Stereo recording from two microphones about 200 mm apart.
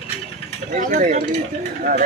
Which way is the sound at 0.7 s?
40° right (ahead or behind).